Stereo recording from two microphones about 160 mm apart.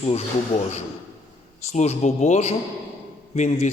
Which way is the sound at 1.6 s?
45° left (ahead or behind).